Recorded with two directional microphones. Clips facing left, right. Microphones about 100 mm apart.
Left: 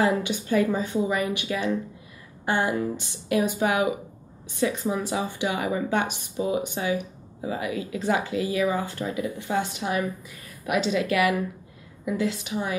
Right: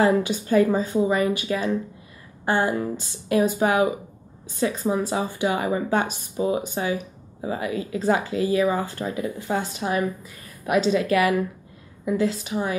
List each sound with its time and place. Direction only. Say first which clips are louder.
0.0 s speech: right 4 dB; 40° right (ahead or behind)
4.8 s speech: right 3 dB; 35° right (ahead or behind)